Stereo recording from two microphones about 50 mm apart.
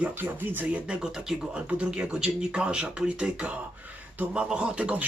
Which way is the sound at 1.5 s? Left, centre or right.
Right.